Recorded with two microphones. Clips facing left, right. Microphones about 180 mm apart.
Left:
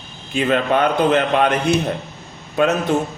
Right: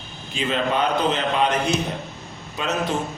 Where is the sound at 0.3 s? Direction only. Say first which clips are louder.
Left 5 dB; 60° left (ahead or behind).